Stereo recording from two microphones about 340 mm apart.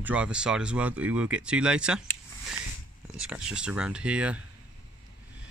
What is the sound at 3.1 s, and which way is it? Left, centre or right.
Speech, centre.